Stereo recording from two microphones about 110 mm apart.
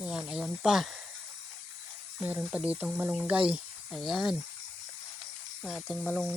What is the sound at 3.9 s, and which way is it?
Speech, centre (ahead or behind).